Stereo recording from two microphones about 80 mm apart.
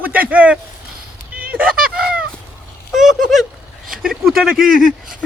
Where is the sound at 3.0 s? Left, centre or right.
Centre.